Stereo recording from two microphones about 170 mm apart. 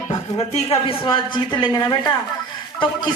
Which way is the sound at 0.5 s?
30° left (ahead or behind).